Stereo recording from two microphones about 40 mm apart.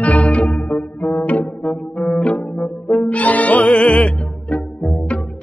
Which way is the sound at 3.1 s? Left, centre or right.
Left.